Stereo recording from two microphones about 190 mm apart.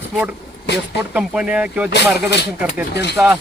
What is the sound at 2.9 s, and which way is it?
Speech, 60° left (ahead or behind).